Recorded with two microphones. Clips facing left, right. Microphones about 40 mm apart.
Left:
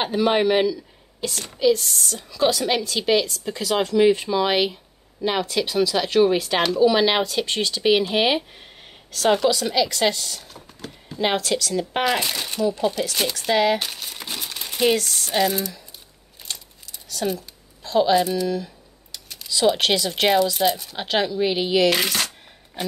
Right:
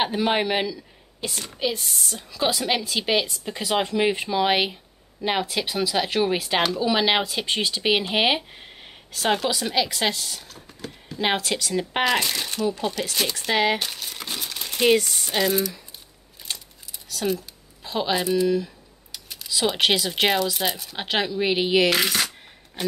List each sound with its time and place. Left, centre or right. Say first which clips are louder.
0.0 s a woman's voice: left 3 dB; centre
1.2 s a woman's voice: left 7 dB; centre
12.0 s speech: right 1 dB; centre
13.3 s speech: left 3 dB; centre
13.7 s crumpling: left 1 dB; centre
15.0 s a woman's voice: right 1 dB; centre
15.3 s speech: left 1 dB; centre
17.1 s a woman's voice: even; centre
21.9 s speech: even; centre